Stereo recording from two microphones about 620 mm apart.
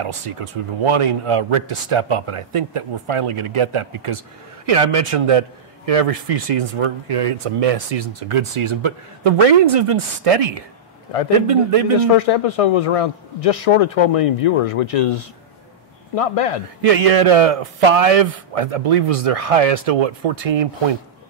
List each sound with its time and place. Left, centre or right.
0.8 s a man's voice: right
8.1 s a man's voice: right
12.1 s speech: left
16.8 s a man's voice: right